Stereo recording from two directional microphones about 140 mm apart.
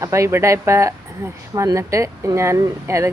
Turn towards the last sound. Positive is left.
turn(degrees=-20)  # may be behind; listen again after turning